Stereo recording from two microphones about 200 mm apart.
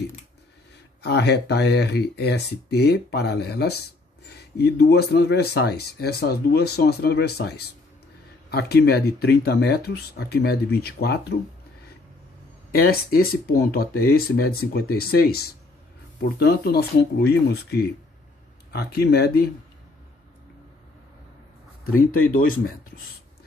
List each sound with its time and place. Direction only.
1.0 s speech: 55° left (ahead or behind)
12.7 s speech: 50° left (ahead or behind)